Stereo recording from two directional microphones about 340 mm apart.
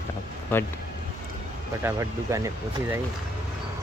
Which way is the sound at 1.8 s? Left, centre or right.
Centre.